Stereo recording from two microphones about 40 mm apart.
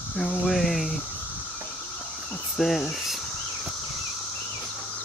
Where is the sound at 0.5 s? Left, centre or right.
Centre.